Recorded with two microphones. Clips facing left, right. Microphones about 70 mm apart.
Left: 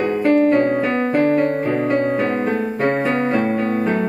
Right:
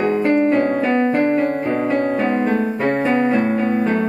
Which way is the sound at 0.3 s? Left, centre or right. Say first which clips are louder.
Left 4 dB; right.